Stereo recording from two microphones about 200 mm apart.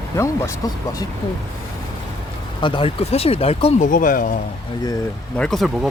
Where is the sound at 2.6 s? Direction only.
25° left (ahead or behind).